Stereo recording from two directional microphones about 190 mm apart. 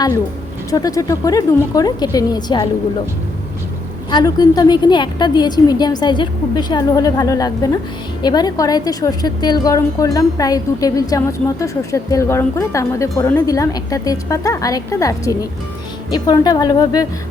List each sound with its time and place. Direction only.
0.7 s a woman's voice: 20° left (ahead or behind)
4.1 s a woman's voice: 20° left (ahead or behind)